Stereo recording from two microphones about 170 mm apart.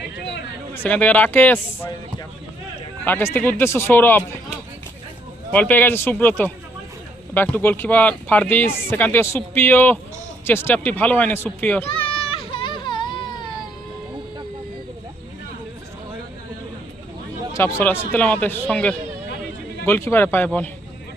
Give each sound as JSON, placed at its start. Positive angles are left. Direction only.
{"t": 0.7, "sound": "speech", "side_deg": 10}
{"t": 3.0, "sound": "speech", "side_deg": 10}
{"t": 5.5, "sound": "speech", "side_deg": 10}
{"t": 11.9, "sound": "a sound", "side_deg": 30}
{"t": 17.6, "sound": "speech", "side_deg": 15}